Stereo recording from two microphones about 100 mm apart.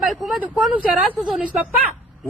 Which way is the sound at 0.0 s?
5° right (ahead or behind).